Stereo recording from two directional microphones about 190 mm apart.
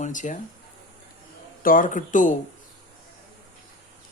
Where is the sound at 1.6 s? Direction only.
45° left (ahead or behind).